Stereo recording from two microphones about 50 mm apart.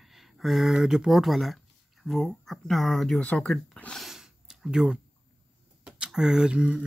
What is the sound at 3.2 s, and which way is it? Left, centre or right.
Speech, left.